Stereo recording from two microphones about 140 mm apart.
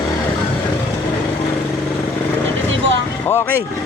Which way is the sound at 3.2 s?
15° left (ahead or behind).